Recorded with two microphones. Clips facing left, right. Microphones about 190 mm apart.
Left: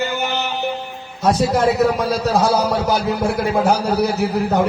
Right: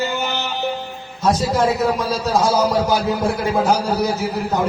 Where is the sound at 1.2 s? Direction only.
60° left (ahead or behind).